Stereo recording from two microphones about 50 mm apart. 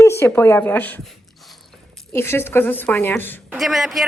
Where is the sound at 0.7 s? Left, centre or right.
Left.